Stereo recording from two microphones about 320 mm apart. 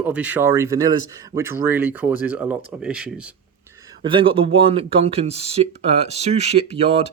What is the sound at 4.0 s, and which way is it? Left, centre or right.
Speech, centre.